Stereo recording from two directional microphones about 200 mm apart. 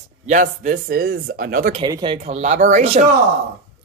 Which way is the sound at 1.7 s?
20° right (ahead or behind).